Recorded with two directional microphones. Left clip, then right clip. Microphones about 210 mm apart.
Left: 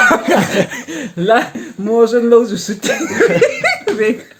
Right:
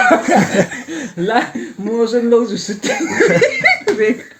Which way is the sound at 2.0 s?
30° left (ahead or behind).